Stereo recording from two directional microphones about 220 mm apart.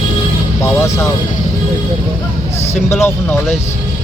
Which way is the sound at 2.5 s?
30° left (ahead or behind).